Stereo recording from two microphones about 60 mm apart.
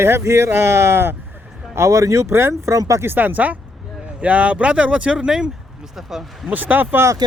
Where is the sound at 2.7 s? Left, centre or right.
Right.